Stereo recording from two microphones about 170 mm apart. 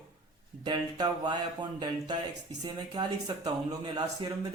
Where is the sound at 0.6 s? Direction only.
25° right (ahead or behind).